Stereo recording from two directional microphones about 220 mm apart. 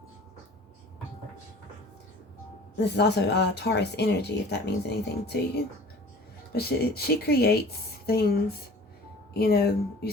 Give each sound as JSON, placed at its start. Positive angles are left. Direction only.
{"t": 2.7, "sound": "speech", "side_deg": 50}
{"t": 6.5, "sound": "speech", "side_deg": 45}
{"t": 9.3, "sound": "speech", "side_deg": 45}